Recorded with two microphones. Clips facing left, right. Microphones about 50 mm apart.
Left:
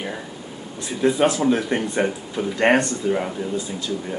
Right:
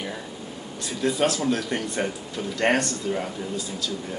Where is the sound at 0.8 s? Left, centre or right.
Centre.